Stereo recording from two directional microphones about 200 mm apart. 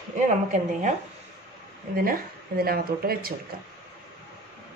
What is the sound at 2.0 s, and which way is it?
Speech, 45° right (ahead or behind).